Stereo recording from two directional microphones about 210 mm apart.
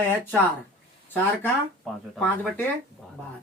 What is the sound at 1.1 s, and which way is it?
Speech, 5° left (ahead or behind).